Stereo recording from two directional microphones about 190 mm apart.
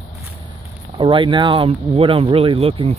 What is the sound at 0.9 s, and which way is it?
Speech, 25° right (ahead or behind).